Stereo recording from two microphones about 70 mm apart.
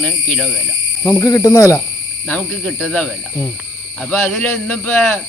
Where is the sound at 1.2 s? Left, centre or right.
Left.